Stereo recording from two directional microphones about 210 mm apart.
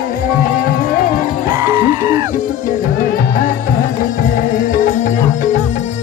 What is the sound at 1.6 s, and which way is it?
Music, 15° right (ahead or behind).